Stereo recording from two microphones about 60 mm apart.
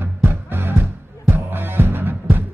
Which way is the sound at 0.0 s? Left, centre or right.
Right.